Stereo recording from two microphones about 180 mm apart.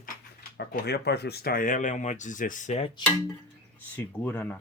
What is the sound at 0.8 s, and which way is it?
Speech, 65° left (ahead or behind).